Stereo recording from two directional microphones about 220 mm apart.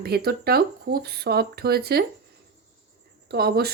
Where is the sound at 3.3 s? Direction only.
45° right (ahead or behind).